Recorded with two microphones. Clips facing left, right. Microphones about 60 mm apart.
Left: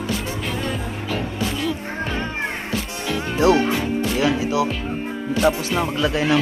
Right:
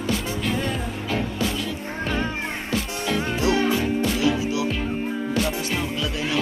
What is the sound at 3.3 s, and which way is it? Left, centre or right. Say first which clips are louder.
Music: left 6 dB; left.